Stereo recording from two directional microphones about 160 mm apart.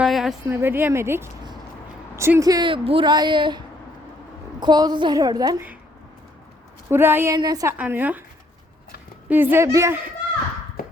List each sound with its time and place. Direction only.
0.0 s a sound: centre (ahead or behind)
0.4 s a woman's voice: 15° right (ahead or behind); by 3.6 s 30° right (ahead or behind)
4.6 s a woman's voice: 25° right (ahead or behind)
6.9 s speech: 15° right (ahead or behind)
7.3 s a woman's voice: 25° right (ahead or behind)
7.8 s speech: 10° right (ahead or behind)
9.3 s speech: 10° right (ahead or behind)
10.8 s a sound: 65° left (ahead or behind)